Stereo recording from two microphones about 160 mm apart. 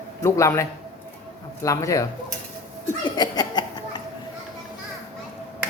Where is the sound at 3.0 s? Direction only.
25° left (ahead or behind).